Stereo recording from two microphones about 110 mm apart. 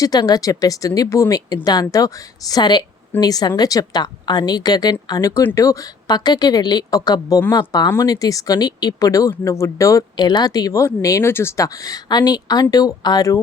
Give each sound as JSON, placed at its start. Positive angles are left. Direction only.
{"t": 0.0, "sound": "speech", "side_deg": 35}